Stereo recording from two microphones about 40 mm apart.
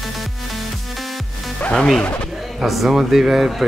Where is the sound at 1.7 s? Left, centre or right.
Centre.